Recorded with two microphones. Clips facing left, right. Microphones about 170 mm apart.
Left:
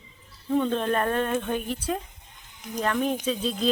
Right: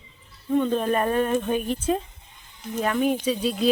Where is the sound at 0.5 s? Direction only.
5° right (ahead or behind); by 2.0 s 20° right (ahead or behind).